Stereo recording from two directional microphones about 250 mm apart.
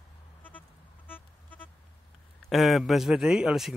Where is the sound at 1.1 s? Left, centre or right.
Centre.